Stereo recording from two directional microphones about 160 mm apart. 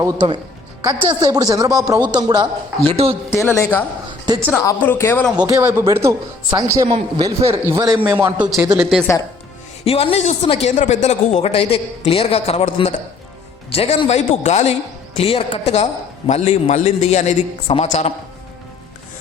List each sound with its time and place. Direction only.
0.0 s speech: 20° right (ahead or behind)
2.9 s speech: 40° right (ahead or behind)
3.2 s speech: 15° left (ahead or behind)
5.6 s a man's voice: 15° right (ahead or behind)
8.6 s speech: 20° right (ahead or behind)
9.1 s speech: 15° left (ahead or behind)
9.8 s speech: 35° left (ahead or behind)